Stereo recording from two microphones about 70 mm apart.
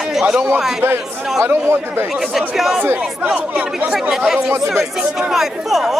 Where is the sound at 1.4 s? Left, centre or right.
Right.